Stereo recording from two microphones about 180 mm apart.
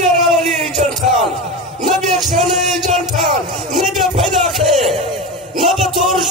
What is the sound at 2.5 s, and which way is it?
Music, 40° right (ahead or behind).